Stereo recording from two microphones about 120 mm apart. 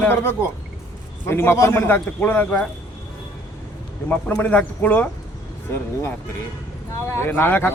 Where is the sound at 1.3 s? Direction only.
20° left (ahead or behind).